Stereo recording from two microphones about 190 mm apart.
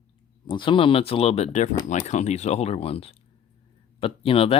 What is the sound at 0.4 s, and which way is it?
Speech, 25° left (ahead or behind).